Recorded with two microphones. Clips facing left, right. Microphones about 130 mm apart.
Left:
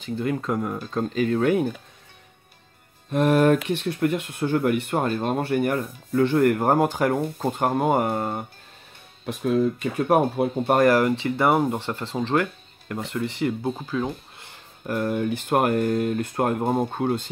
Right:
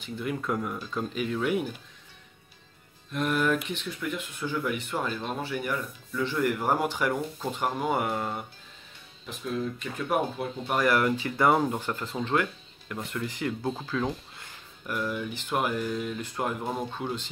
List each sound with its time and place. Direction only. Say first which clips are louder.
0.0 s speech: left 6 dB; 40° left (ahead or behind)
0.4 s speech: left 4 dB; 25° left (ahead or behind)
1.2 s speech: left 7 dB; 50° left (ahead or behind)
3.1 s speech: left 8 dB; 65° left (ahead or behind); by 8.5 s 45° left (ahead or behind)
9.2 s speech: left 10 dB; 70° left (ahead or behind)
11.2 s speech: left 3 dB; 25° left (ahead or behind)
11.8 s speech: left 4 dB; 30° left (ahead or behind)
13.7 s speech: left 3 dB; 10° left (ahead or behind)
14.9 s speech: left 7 dB; 50° left (ahead or behind)